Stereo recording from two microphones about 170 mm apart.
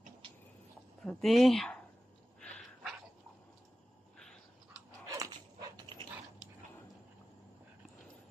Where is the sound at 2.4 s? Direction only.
5° left (ahead or behind).